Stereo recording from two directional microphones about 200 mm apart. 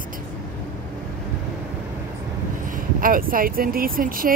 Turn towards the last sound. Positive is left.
turn(degrees=-45)  # may be behind; listen again after turning